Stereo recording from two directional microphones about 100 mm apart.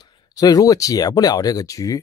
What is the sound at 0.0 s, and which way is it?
Speech, 40° left (ahead or behind).